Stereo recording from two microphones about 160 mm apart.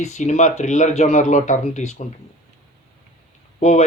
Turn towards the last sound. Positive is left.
turn(degrees=45)  # may be behind; listen again after turning